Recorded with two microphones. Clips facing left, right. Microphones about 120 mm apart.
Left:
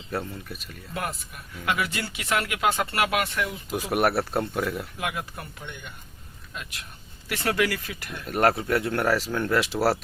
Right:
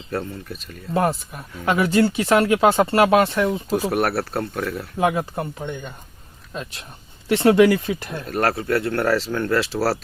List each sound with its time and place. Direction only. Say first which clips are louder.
0.5 s speech: right 4 dB; 5° left (ahead or behind)
0.9 s speech: right 11 dB; 35° right (ahead or behind)
3.9 s speech: right 1 dB; 15° left (ahead or behind)
4.9 s speech: right 11 dB; 35° right (ahead or behind)
8.3 s speech: right 1 dB; 20° left (ahead or behind)